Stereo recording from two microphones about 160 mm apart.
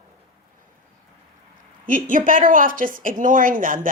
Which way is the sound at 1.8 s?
55° right (ahead or behind).